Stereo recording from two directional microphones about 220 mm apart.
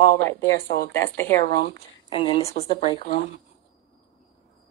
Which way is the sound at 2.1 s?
25° left (ahead or behind).